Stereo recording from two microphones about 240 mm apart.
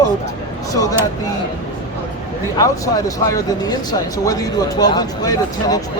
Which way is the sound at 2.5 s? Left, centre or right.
Centre.